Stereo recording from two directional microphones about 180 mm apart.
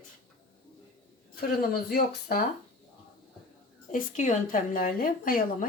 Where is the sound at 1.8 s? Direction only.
55° left (ahead or behind).